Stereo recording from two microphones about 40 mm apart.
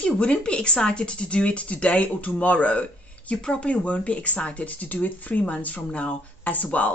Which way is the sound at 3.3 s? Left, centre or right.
Left.